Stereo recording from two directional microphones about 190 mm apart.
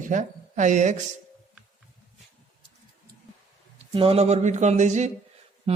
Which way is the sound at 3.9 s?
30° right (ahead or behind).